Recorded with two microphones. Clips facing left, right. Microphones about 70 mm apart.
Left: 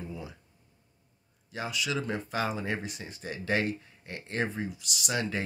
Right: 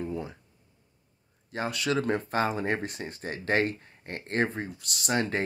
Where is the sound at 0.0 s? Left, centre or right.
Right.